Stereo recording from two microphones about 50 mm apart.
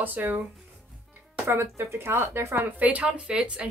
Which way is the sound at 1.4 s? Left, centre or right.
Right.